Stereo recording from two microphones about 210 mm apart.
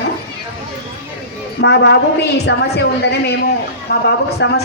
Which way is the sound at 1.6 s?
55° left (ahead or behind).